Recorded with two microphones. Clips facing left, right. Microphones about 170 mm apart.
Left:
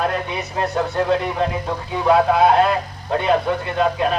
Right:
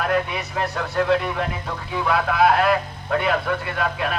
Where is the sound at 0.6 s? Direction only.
25° left (ahead or behind).